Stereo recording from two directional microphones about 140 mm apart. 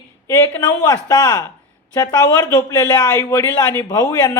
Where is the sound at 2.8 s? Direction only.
15° left (ahead or behind).